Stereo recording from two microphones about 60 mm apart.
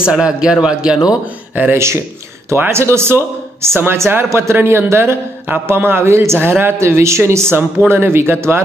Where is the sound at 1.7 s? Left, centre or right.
Right.